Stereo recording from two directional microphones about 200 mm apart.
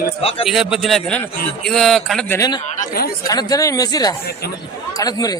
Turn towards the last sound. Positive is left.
turn(degrees=20)  # may be behind; listen again after turning